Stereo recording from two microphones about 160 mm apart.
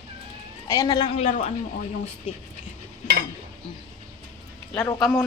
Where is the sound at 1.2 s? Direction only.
45° left (ahead or behind).